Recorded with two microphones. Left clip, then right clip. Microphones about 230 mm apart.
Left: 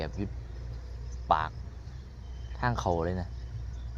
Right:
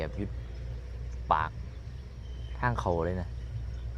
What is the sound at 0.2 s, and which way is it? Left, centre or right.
Speech, centre.